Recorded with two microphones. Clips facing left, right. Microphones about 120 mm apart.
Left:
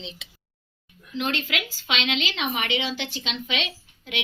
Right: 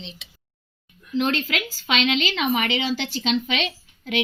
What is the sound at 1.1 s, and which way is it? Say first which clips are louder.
A woman's voice: right 5 dB; 40° right (ahead or behind).